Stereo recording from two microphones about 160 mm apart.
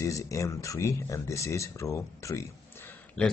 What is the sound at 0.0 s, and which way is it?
Speech, 20° left (ahead or behind).